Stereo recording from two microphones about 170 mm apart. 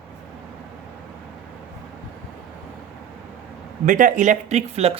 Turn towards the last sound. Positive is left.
turn(degrees=-40)  # may be behind; listen again after turning